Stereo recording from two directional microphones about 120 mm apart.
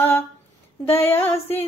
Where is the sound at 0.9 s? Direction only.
20° left (ahead or behind).